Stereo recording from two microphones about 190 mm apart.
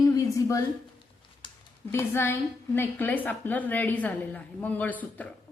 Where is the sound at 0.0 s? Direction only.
20° left (ahead or behind).